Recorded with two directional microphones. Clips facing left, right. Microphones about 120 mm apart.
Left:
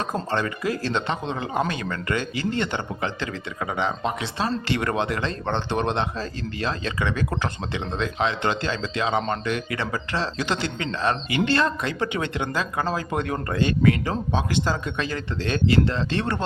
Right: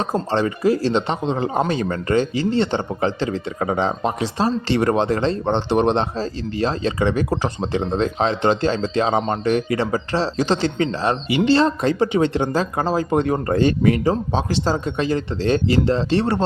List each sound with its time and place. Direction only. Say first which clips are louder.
0.0 s speech: right 5 dB; 25° right (ahead or behind)